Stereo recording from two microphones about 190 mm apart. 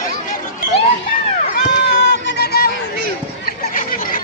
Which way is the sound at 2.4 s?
55° left (ahead or behind).